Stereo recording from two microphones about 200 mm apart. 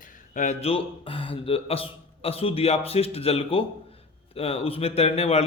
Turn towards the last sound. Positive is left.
turn(degrees=30)  # may be behind; listen again after turning